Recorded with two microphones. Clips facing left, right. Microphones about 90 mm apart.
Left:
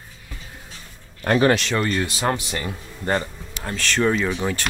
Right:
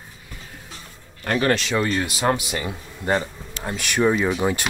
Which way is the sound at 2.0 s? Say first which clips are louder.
Right 1 dB; 15° right (ahead or behind).